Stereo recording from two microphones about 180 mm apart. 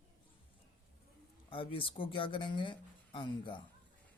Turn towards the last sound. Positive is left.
turn(degrees=25)  # may be behind; listen again after turning